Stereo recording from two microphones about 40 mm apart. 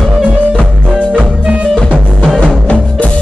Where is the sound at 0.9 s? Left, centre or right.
Right.